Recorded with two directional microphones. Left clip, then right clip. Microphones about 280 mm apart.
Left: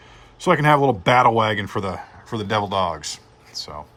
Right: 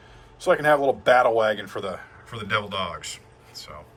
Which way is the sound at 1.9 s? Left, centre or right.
Centre.